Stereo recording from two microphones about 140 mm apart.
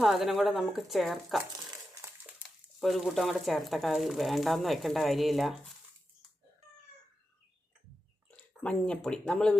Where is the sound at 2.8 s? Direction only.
Centre (ahead or behind).